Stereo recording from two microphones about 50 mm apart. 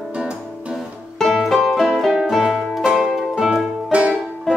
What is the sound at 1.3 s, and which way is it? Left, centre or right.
Music, centre.